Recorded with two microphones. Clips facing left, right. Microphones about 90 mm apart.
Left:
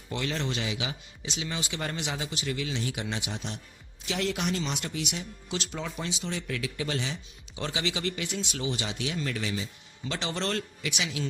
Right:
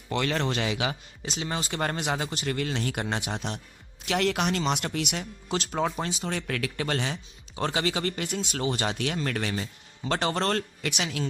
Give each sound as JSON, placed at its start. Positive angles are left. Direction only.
{"t": 0.1, "sound": "speech", "side_deg": -65}
{"t": 5.5, "sound": "speech", "side_deg": -45}